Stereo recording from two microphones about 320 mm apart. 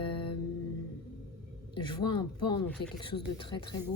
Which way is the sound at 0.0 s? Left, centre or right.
Centre.